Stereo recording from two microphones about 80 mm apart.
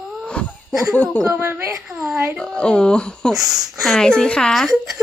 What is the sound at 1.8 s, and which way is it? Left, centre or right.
Speech, centre.